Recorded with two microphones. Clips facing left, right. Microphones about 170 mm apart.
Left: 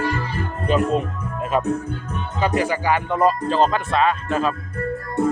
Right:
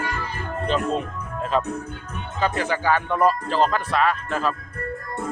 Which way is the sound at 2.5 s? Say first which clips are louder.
Left 3 dB; 10° left (ahead or behind).